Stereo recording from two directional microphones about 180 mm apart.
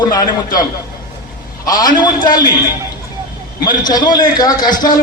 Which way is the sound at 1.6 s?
20° left (ahead or behind).